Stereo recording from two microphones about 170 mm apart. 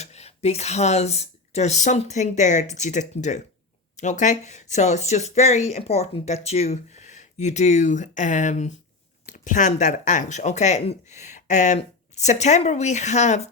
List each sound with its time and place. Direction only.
0.0 s speech: 40° left (ahead or behind)